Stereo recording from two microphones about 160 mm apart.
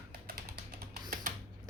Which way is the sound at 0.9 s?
60° right (ahead or behind).